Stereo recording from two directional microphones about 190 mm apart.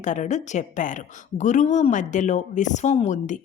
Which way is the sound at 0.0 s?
40° left (ahead or behind).